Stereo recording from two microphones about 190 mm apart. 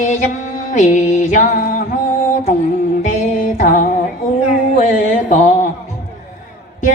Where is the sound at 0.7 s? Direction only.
40° left (ahead or behind).